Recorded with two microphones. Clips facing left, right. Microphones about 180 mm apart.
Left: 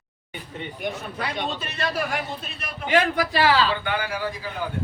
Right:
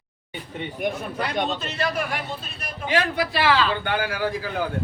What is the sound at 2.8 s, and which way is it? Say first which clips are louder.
Speech: left 2 dB; 50° left (ahead or behind).